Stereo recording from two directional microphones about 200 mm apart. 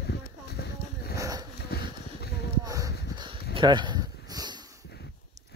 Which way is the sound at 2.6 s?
20° right (ahead or behind).